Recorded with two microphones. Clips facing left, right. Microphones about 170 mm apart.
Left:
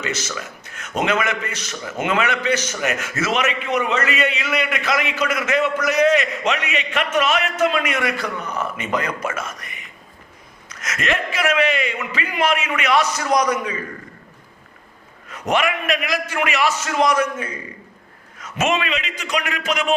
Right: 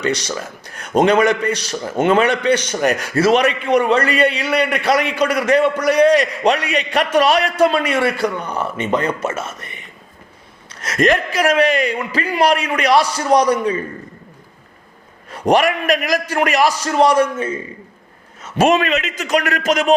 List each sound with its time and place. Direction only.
0.0 s a man's voice: 35° right (ahead or behind)
15.3 s a man's voice: 35° right (ahead or behind)